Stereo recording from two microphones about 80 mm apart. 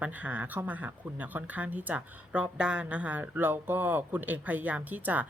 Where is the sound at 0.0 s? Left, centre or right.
Centre.